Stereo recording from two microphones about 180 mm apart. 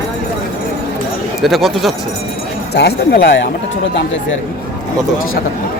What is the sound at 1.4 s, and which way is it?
Speech, centre (ahead or behind).